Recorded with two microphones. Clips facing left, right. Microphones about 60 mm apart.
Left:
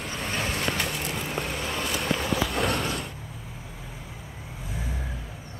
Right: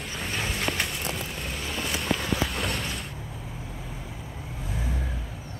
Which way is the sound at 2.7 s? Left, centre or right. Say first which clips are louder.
Left 4 dB; left.